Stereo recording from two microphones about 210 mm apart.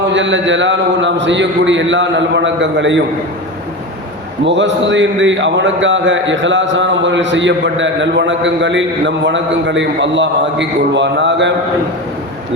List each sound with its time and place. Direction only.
0.1 s a man's voice: 60° right (ahead or behind)
4.4 s a man's voice: 60° right (ahead or behind)